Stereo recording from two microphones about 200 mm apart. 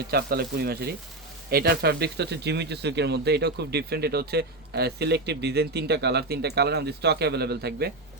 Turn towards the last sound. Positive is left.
turn(degrees=-55)  # may be behind; listen again after turning